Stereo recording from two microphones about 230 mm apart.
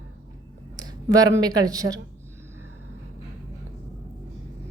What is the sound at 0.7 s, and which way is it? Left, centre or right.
Speech, centre.